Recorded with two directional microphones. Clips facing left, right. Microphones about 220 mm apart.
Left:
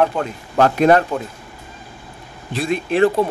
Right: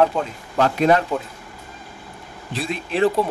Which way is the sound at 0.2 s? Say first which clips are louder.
Left 4 dB; 55° left (ahead or behind).